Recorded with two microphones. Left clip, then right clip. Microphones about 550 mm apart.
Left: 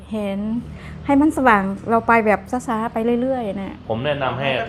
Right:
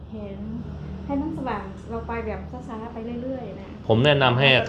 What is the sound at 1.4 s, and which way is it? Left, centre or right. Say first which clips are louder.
A woman's voice: left 15 dB; left.